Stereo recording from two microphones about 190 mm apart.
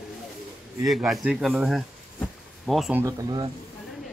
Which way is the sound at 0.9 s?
Centre (ahead or behind).